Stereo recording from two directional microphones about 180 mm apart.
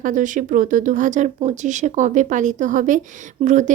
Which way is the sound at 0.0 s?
45° right (ahead or behind).